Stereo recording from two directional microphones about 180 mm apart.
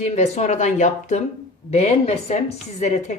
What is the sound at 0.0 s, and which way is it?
Speech, 40° left (ahead or behind).